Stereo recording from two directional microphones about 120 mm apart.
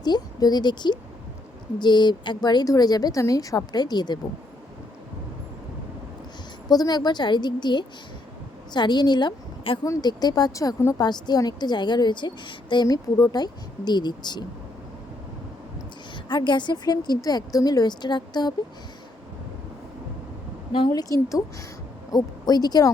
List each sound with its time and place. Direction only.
0.0 s a woman's voice: 35° left (ahead or behind)
6.7 s a woman's voice: 35° left (ahead or behind)
16.3 s a woman's voice: 40° left (ahead or behind)
20.9 s a woman's voice: 30° left (ahead or behind)